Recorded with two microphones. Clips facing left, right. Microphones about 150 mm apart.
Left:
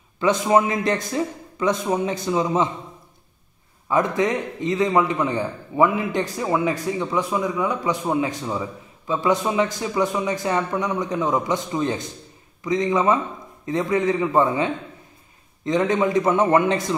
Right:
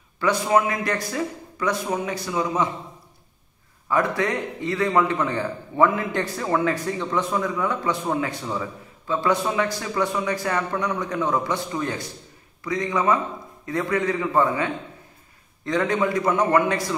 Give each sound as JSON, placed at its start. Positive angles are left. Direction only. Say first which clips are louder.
{"t": 0.2, "sound": "a man's voice", "louder": "left 2 dB", "side_deg": 25}
{"t": 3.9, "sound": "a man's voice", "louder": "left 2 dB", "side_deg": 20}